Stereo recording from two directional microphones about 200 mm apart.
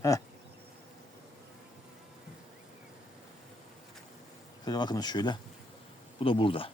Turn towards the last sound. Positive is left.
turn(degrees=25)  # may be behind; listen again after turning